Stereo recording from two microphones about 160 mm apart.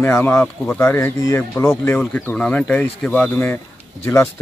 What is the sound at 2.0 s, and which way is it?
Speech, 5° left (ahead or behind).